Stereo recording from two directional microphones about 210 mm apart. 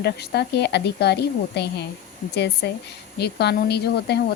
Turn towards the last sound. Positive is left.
turn(degrees=50)  # may be behind; listen again after turning